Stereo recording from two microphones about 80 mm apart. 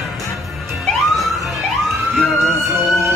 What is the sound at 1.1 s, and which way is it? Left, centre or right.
Emergency vehicle, centre.